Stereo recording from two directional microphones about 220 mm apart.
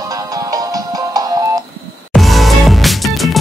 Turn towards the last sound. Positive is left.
turn(degrees=0)  # may be behind; listen again after turning